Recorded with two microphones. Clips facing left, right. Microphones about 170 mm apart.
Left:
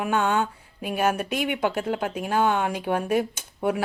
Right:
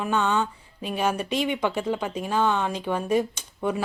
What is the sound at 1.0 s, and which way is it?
Speech, 55° left (ahead or behind).